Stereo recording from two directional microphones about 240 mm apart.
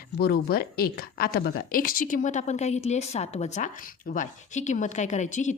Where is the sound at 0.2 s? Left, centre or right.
Left.